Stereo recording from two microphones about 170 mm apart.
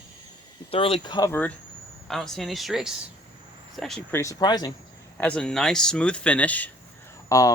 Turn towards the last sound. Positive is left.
turn(degrees=20)  # may be behind; listen again after turning